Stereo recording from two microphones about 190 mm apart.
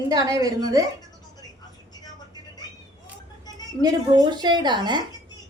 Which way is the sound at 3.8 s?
20° right (ahead or behind).